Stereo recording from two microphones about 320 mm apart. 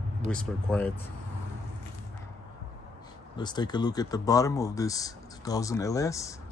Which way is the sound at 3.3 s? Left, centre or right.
Centre.